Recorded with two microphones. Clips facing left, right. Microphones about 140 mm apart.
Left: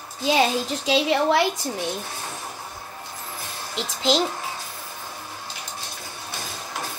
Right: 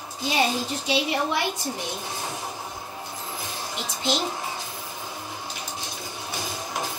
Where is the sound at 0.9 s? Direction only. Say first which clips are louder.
Left 6 dB; 90° left.